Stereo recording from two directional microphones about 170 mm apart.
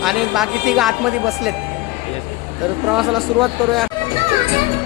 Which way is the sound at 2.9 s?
Centre (ahead or behind).